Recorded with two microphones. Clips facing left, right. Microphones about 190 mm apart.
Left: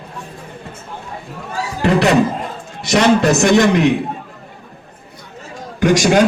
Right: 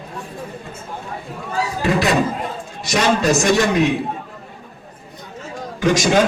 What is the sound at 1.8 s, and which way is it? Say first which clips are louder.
A man's voice: left 5 dB; 65° left (ahead or behind).